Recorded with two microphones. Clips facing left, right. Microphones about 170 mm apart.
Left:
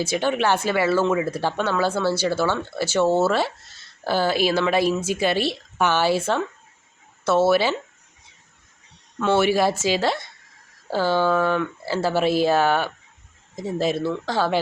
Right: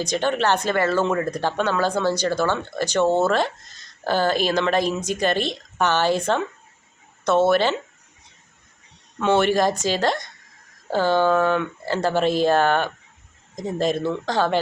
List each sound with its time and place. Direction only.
0.0 s speech: 10° left (ahead or behind)
9.4 s speech: 10° left (ahead or behind)